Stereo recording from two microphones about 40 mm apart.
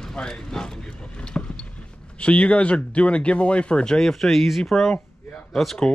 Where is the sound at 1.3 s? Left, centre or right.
Centre.